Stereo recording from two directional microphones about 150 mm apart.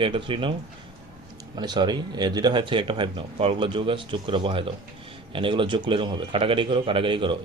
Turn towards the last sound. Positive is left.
turn(degrees=-35)  # may be behind; listen again after turning